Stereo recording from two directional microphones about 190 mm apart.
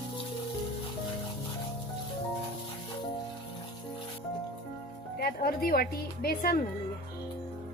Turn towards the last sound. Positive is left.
turn(degrees=55)  # may be behind; listen again after turning